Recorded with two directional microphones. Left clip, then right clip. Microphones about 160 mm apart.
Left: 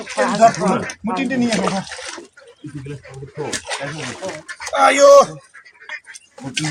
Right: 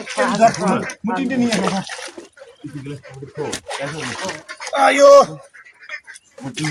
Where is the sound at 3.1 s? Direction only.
20° right (ahead or behind).